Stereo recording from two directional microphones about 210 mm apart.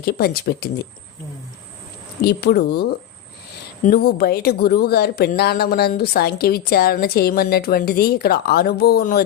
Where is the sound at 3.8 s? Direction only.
50° left (ahead or behind).